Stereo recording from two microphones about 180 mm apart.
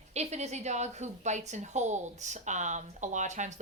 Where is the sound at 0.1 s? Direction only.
40° right (ahead or behind).